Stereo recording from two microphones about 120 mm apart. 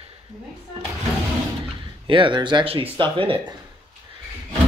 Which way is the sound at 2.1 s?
45° right (ahead or behind).